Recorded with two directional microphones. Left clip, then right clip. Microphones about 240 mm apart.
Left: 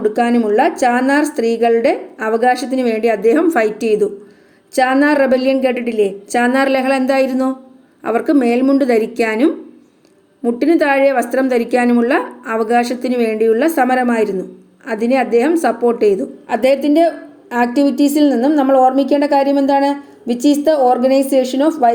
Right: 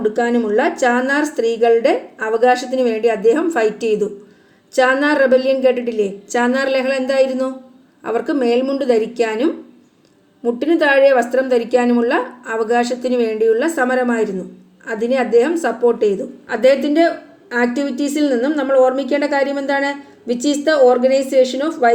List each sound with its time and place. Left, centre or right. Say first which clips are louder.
0.0 s a woman's voice: left 2 dB; left